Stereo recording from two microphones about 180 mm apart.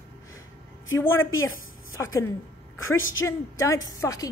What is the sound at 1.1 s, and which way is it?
Speech, 90° left.